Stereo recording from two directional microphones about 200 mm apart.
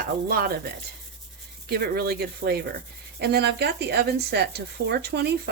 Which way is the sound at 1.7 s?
50° right (ahead or behind).